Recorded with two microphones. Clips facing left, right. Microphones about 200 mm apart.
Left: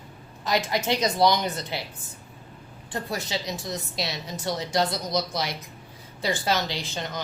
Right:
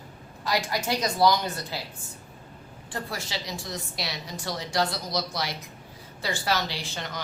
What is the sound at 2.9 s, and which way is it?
Speech, 20° left (ahead or behind).